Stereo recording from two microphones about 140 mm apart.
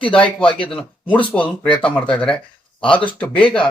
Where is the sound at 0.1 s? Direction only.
5° left (ahead or behind).